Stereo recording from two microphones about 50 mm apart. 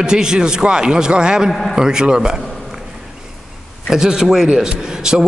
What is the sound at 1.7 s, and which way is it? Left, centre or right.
Speech, centre.